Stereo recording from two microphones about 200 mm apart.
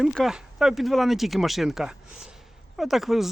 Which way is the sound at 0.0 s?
Centre (ahead or behind).